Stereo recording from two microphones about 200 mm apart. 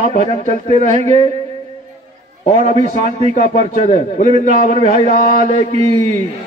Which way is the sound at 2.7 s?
35° right (ahead or behind).